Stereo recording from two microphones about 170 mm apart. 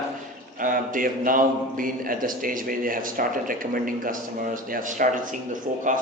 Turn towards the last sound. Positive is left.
turn(degrees=-50)  # may be behind; listen again after turning